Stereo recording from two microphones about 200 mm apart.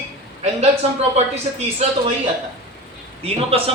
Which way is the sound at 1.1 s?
35° right (ahead or behind).